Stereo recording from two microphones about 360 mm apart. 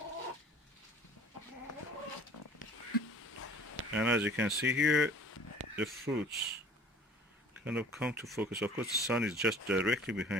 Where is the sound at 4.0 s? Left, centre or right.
Centre.